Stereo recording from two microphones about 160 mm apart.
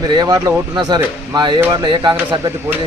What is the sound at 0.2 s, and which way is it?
Speech, 25° right (ahead or behind).